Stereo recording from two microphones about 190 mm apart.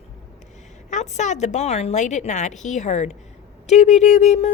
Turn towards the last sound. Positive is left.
turn(degrees=35)  # may be behind; listen again after turning